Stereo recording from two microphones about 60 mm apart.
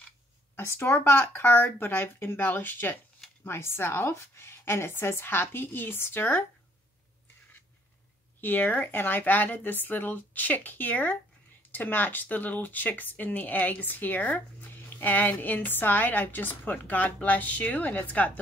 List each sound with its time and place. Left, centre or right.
0.6 s a woman's voice: left
8.4 s a woman's voice: left